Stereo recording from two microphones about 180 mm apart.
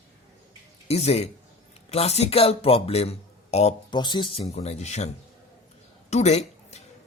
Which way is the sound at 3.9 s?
25° left (ahead or behind).